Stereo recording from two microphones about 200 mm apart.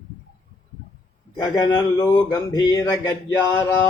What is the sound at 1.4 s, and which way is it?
Speech, 20° left (ahead or behind).